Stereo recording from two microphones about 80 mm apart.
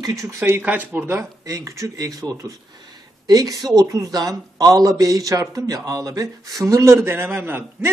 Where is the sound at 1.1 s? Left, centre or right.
Right.